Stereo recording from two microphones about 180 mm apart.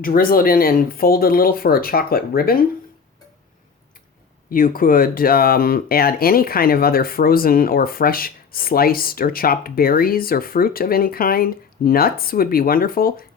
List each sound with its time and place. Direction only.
0.0 s speech: 50° left (ahead or behind)
4.5 s speech: 50° left (ahead or behind)